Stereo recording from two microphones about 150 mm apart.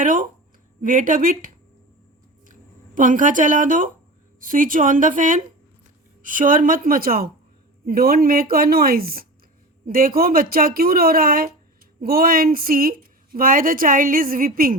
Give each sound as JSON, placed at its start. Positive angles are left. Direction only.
{"t": 0.0, "sound": "a woman's voice", "side_deg": -60}
{"t": 2.5, "sound": "a woman's voice", "side_deg": -60}
{"t": 9.8, "sound": "a woman's voice", "side_deg": -70}